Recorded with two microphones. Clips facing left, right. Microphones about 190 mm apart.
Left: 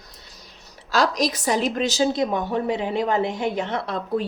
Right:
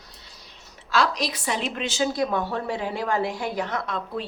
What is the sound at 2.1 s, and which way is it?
A woman's voice, 20° left (ahead or behind).